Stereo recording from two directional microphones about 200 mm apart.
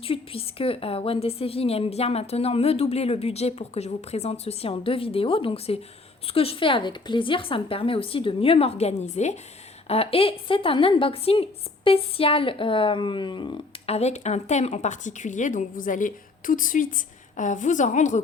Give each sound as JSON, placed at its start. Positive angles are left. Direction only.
{"t": 0.0, "sound": "a woman's voice", "side_deg": 25}